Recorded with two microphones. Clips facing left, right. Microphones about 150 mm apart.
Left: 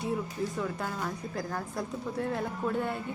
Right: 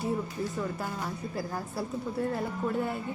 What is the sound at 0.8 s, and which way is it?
A woman's voice, 5° right (ahead or behind).